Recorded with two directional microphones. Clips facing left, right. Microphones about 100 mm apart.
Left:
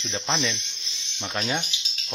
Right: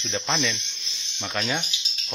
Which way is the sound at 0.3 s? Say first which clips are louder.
Even; 15° left (ahead or behind).